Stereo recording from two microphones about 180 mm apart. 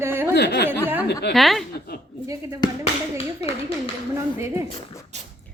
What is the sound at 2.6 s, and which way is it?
Speech, 20° left (ahead or behind).